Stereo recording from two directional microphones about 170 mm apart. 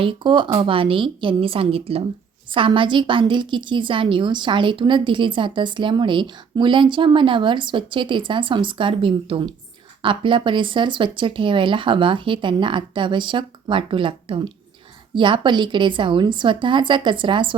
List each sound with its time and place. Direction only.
0.0 s a woman's voice: 30° right (ahead or behind)